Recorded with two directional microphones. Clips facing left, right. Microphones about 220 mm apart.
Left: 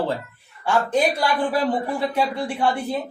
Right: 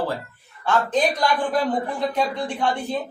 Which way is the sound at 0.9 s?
10° left (ahead or behind).